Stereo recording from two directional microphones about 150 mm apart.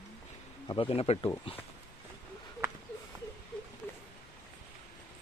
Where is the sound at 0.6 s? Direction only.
35° left (ahead or behind).